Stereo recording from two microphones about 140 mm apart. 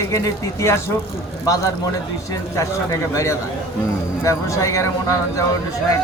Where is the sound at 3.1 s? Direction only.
20° left (ahead or behind).